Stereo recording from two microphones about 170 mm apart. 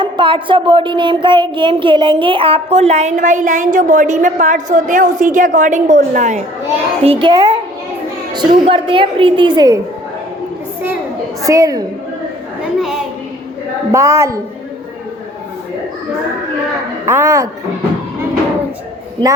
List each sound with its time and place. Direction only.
0.0 s a woman's voice: 30° right (ahead or behind); by 6.4 s 45° right (ahead or behind)
7.0 s a woman's voice: 30° right (ahead or behind)
11.4 s a woman's voice: 20° right (ahead or behind)
13.9 s a woman's voice: 15° right (ahead or behind)
17.1 s a woman's voice: 15° right (ahead or behind)